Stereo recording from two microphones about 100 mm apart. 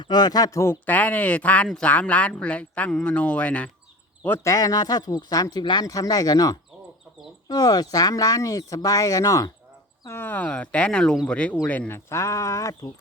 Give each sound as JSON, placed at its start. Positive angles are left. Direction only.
{"t": 0.0, "sound": "speech", "side_deg": 45}
{"t": 4.4, "sound": "speech", "side_deg": 40}
{"t": 10.1, "sound": "speech", "side_deg": 20}
{"t": 11.9, "sound": "speech", "side_deg": 30}